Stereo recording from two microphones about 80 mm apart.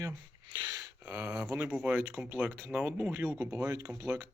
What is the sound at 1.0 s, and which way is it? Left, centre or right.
Speech, right.